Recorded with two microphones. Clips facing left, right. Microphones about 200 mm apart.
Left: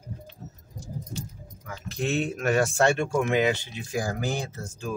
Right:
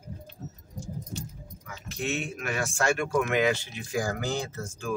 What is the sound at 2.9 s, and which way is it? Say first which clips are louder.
Speech: left 2 dB; 25° left (ahead or behind).